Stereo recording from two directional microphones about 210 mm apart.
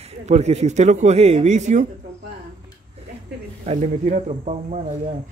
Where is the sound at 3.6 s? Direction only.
35° right (ahead or behind).